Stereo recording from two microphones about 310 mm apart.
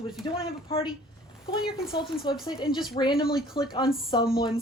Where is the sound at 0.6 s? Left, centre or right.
Centre.